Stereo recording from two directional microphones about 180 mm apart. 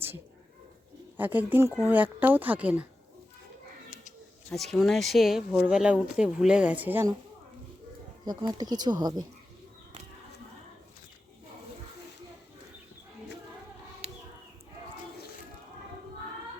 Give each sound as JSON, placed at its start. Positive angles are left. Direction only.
{"t": 1.1, "sound": "speech", "side_deg": -10}
{"t": 4.5, "sound": "speech", "side_deg": 0}
{"t": 8.2, "sound": "speech", "side_deg": -20}